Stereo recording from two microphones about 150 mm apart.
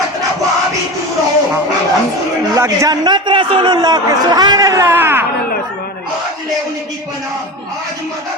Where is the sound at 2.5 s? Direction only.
20° right (ahead or behind).